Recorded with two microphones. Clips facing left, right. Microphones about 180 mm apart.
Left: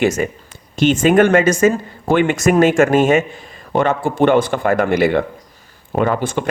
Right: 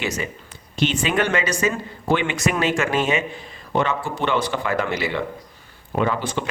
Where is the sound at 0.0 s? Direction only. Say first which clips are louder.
Left 10 dB; 50° left (ahead or behind).